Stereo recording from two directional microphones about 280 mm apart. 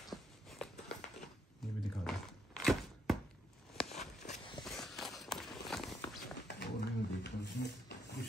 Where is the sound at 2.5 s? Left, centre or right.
Centre.